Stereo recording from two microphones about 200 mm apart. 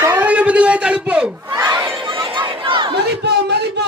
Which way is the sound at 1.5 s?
20° right (ahead or behind).